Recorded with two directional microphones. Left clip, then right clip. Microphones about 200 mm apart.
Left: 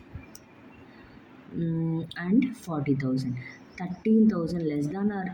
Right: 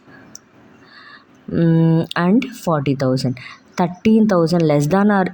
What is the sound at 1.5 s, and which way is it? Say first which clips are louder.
Speech: right 15 dB; 50° right (ahead or behind).